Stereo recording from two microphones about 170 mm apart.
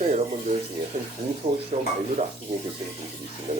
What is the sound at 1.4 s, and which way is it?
Speech, 30° right (ahead or behind).